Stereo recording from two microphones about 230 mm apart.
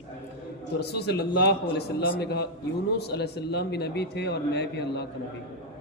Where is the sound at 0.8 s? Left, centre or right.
Left.